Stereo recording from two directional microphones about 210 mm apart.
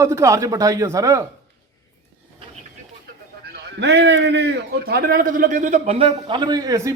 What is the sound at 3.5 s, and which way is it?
A man's voice, 55° right (ahead or behind).